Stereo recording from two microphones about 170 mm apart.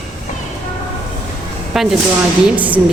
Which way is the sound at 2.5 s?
10° right (ahead or behind).